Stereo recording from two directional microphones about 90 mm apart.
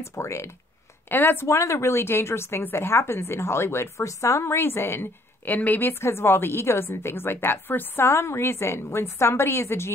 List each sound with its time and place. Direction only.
0.1 s speech: 30° left (ahead or behind)